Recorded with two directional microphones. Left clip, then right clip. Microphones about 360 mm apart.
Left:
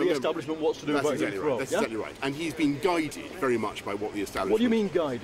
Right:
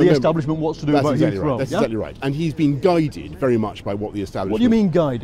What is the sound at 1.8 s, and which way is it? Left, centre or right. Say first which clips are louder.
Speech: right 7 dB; right.